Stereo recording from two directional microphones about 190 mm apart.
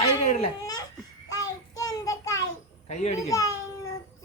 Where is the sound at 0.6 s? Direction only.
20° left (ahead or behind).